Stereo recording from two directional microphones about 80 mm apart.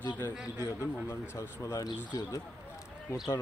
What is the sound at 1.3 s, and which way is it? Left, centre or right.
Speech, left.